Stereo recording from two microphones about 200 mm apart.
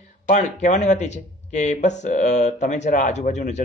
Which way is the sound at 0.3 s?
35° left (ahead or behind).